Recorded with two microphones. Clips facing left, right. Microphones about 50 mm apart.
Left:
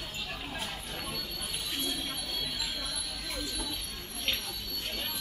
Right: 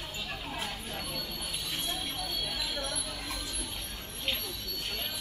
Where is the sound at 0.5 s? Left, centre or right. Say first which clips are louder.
Right 1 dB; centre.